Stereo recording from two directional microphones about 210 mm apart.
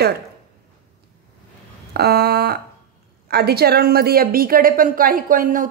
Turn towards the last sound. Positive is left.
turn(degrees=-40)  # may be behind; listen again after turning